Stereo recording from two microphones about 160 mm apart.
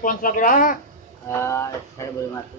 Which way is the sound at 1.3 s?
15° left (ahead or behind).